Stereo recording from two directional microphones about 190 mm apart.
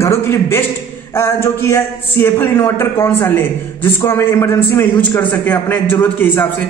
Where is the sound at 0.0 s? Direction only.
15° left (ahead or behind).